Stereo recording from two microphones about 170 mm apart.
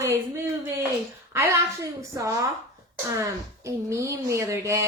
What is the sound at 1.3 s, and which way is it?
A woman's voice, 15° right (ahead or behind).